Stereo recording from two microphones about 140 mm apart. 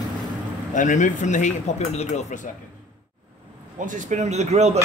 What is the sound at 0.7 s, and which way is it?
Speech, 65° left (ahead or behind).